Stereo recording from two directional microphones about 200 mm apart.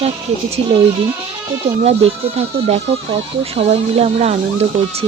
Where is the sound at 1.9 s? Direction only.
30° right (ahead or behind).